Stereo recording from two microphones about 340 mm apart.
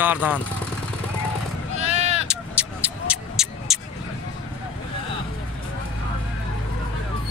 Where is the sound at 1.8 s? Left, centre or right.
Centre.